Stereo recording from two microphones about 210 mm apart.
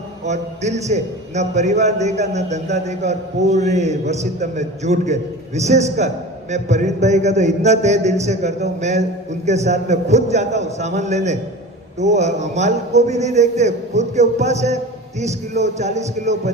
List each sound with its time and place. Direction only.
0.3 s a man's voice: 35° right (ahead or behind)